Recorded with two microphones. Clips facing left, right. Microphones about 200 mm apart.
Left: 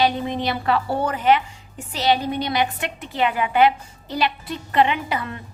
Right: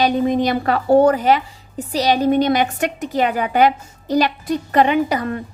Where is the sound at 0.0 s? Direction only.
45° right (ahead or behind).